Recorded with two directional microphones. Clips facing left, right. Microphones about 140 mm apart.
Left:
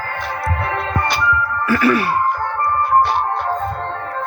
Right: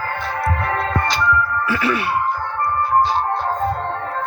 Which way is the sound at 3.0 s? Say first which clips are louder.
Left 1 dB; 65° left (ahead or behind).